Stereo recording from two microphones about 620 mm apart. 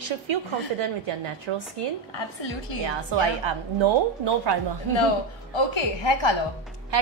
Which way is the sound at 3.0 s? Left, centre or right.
Right.